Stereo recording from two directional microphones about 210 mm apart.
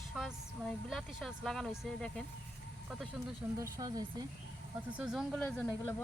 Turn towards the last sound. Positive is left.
turn(degrees=5)  # may be behind; listen again after turning